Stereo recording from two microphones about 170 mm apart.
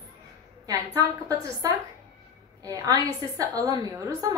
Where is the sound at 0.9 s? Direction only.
20° right (ahead or behind).